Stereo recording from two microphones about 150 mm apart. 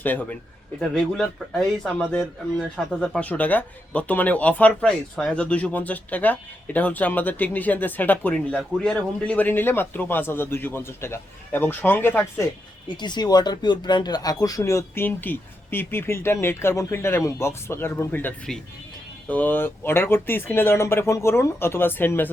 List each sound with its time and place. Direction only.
0.0 s speech: 10° left (ahead or behind)
13.0 s speech: 30° left (ahead or behind); by 22.3 s 15° left (ahead or behind)